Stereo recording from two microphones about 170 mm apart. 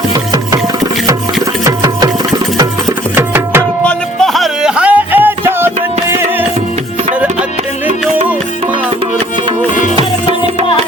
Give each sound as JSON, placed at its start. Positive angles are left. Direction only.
{"t": 1.6, "sound": "music", "side_deg": -20}
{"t": 3.2, "sound": "tabla", "side_deg": -15}
{"t": 3.8, "sound": "music", "side_deg": 0}